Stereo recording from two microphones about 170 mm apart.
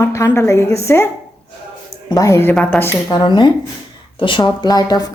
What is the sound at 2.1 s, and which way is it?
Speech, 15° left (ahead or behind).